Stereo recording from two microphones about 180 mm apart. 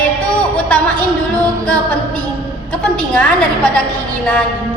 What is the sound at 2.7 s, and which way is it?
A woman's voice, 5° left (ahead or behind).